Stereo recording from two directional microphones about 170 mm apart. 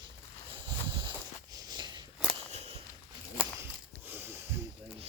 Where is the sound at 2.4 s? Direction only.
40° right (ahead or behind).